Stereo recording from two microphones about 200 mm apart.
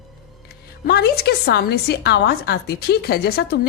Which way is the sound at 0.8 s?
50° left (ahead or behind).